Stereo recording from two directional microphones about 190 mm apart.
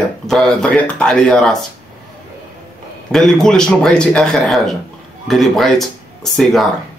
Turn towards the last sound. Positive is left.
turn(degrees=0)  # may be behind; listen again after turning